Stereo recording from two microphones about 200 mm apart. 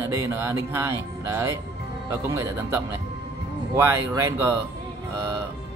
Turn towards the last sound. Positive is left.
turn(degrees=-15)  # may be behind; listen again after turning